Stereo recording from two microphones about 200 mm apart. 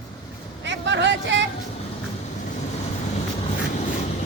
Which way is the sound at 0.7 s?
60° right (ahead or behind).